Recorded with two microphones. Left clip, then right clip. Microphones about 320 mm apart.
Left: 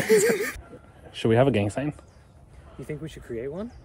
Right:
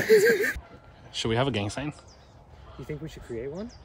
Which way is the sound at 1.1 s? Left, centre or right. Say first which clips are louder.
Left 6 dB; centre.